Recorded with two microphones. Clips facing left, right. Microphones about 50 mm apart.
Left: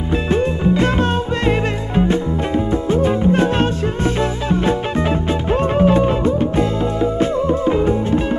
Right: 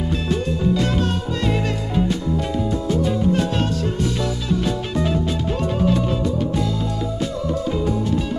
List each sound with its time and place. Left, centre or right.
0.1 s music: left